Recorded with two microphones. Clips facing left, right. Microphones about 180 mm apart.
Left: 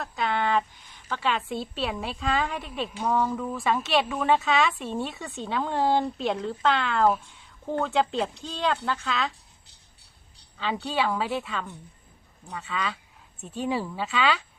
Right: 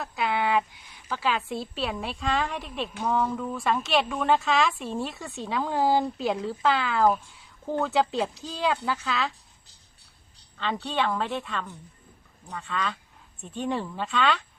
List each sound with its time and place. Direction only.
0.0 s a woman's voice: 5° right (ahead or behind)
10.6 s speech: 5° left (ahead or behind)